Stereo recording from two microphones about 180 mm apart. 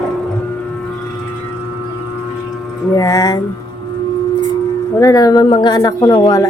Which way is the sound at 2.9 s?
20° left (ahead or behind).